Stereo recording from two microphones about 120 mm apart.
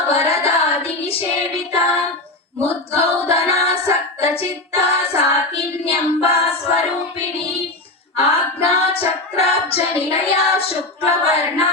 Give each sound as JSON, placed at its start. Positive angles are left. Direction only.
{"t": 0.1, "sound": "singing", "side_deg": 55}
{"t": 0.4, "sound": "child singing", "side_deg": 55}
{"t": 2.6, "sound": "female singing", "side_deg": 55}
{"t": 4.2, "sound": "child singing", "side_deg": 55}
{"t": 8.2, "sound": "female singing", "side_deg": 55}